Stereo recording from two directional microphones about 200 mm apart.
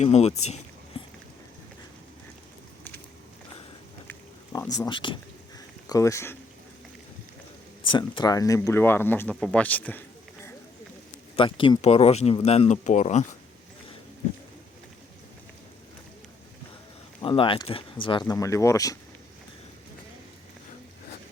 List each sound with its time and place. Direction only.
0.0 s speech: 35° left (ahead or behind)
0.4 s a sound: 35° left (ahead or behind)
4.9 s speech: 25° left (ahead or behind)
7.9 s speech: 25° left (ahead or behind); by 10.0 s 10° left (ahead or behind)
11.3 s speech: 25° left (ahead or behind)
17.2 s speech: 25° left (ahead or behind)